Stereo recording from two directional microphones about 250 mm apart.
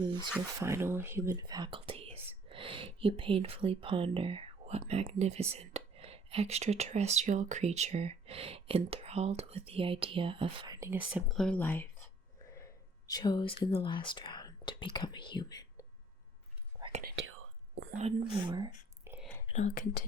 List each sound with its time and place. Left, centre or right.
0.0 s speech: centre
13.1 s speech: centre
17.0 s whispering: right
17.2 s whispering: right
17.9 s speech: right
19.5 s speech: left